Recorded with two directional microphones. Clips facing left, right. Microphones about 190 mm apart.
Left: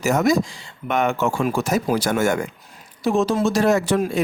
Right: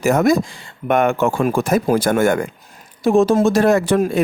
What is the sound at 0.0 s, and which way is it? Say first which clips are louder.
Speech: right 3 dB; 55° right (ahead or behind).